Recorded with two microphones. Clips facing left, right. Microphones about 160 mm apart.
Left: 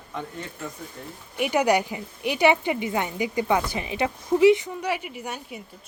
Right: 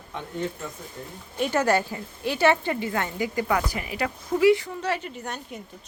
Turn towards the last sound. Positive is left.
turn(degrees=10)  # may be behind; listen again after turning